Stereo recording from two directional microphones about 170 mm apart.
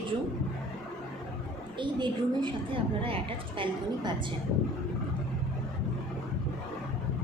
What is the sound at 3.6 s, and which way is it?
Speech, 30° right (ahead or behind).